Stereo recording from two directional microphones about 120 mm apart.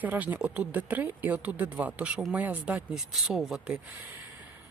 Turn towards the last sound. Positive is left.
turn(degrees=-5)  # may be behind; listen again after turning